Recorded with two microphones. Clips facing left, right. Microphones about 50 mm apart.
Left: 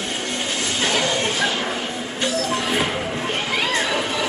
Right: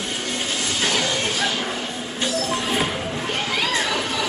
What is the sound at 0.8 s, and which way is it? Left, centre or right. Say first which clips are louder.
Speech: left 2 dB; left.